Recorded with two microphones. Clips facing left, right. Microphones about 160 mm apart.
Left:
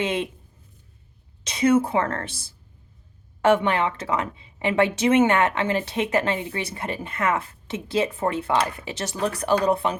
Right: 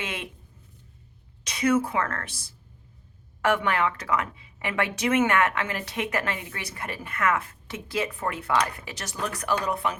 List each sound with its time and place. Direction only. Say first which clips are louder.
0.0 s a woman's voice: left 10 dB; 25° left (ahead or behind)
1.5 s a woman's voice: left 4 dB; 25° left (ahead or behind)
3.4 s a woman's voice: left 5 dB; 25° left (ahead or behind)